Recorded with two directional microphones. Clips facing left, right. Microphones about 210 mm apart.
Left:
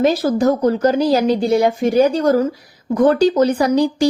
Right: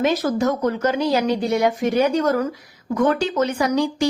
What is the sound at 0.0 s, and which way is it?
Speech, 30° left (ahead or behind).